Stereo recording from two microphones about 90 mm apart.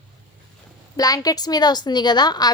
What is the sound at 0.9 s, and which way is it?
A woman's voice, 45° left (ahead or behind).